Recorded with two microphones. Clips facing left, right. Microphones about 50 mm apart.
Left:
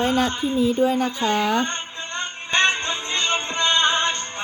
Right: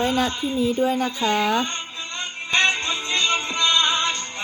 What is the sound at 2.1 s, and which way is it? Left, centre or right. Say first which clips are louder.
Music: even; left.